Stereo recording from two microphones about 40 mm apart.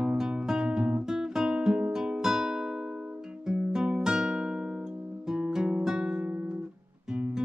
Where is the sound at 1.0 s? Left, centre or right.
Centre.